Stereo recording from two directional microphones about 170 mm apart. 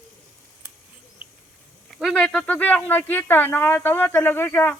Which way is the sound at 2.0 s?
5° left (ahead or behind).